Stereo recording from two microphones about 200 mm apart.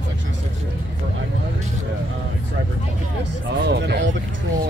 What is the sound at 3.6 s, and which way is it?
Music, 55° right (ahead or behind).